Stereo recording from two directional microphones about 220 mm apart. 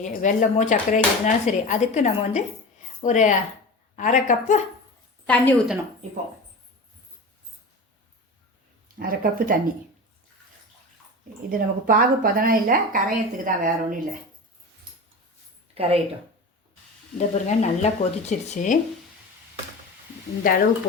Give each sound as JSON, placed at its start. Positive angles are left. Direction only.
{"t": 0.0, "sound": "speech", "side_deg": 35}
{"t": 5.2, "sound": "a woman's voice", "side_deg": 5}
{"t": 9.0, "sound": "speech", "side_deg": -40}
{"t": 11.4, "sound": "speech", "side_deg": -40}
{"t": 15.7, "sound": "speech", "side_deg": -25}
{"t": 17.2, "sound": "speech", "side_deg": 30}
{"t": 20.4, "sound": "speech", "side_deg": 40}